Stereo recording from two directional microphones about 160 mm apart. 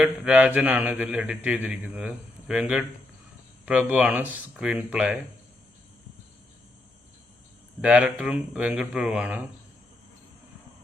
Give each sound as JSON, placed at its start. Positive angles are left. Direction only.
{"t": 0.0, "sound": "a man's voice", "side_deg": -5}
{"t": 7.8, "sound": "a man's voice", "side_deg": -5}